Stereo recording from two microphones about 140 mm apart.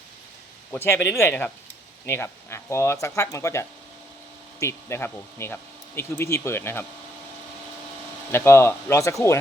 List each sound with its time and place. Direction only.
0.7 s speech: 15° left (ahead or behind)
8.3 s speech: 15° left (ahead or behind)